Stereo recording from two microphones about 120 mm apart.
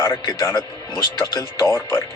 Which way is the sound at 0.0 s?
35° left (ahead or behind).